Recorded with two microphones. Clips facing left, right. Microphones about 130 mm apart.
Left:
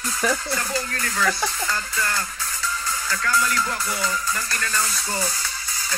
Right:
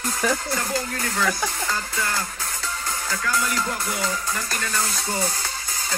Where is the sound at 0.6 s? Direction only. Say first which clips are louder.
Right 1 dB; 10° right (ahead or behind).